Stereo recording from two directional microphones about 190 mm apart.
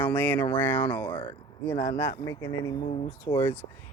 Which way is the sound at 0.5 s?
10° left (ahead or behind).